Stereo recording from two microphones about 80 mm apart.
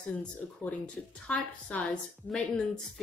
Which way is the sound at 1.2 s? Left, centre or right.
Centre.